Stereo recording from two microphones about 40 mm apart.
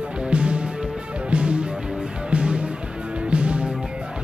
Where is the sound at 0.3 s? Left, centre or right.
Right.